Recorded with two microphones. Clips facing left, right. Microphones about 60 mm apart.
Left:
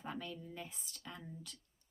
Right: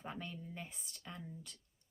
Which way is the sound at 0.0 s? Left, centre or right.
Right.